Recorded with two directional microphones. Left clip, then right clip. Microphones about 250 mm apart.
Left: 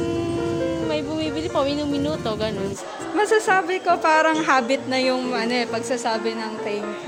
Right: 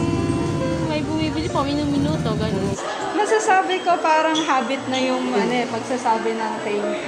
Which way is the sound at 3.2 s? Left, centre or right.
Left.